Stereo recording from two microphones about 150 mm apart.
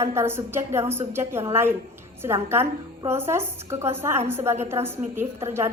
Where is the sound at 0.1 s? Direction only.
15° right (ahead or behind).